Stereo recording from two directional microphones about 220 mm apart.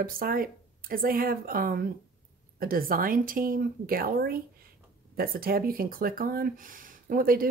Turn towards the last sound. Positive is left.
turn(degrees=-40)  # may be behind; listen again after turning